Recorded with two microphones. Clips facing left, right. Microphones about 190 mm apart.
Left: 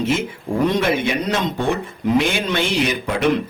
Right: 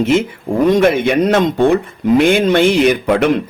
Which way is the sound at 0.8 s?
55° right (ahead or behind).